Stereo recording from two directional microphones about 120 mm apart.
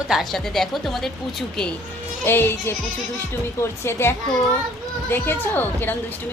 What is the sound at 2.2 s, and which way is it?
Speech, 20° left (ahead or behind).